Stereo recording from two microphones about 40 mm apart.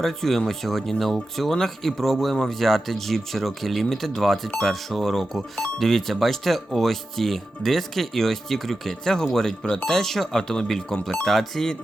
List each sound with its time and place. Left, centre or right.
0.0 s speech: centre
11.3 s speech: centre